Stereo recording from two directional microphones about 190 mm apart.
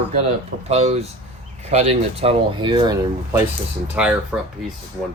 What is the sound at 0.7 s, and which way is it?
Speech, 35° right (ahead or behind).